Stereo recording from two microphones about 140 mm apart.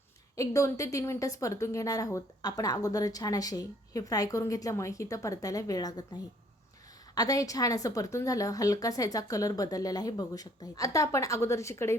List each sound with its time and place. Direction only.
0.3 s a woman's voice: 20° left (ahead or behind)
7.2 s a woman's voice: 25° left (ahead or behind)